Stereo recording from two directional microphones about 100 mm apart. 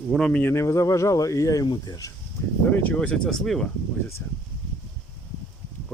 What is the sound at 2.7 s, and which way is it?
Speech, 15° left (ahead or behind).